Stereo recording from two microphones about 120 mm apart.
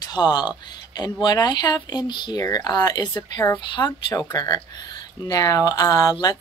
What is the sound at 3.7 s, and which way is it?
Speech, 40° left (ahead or behind).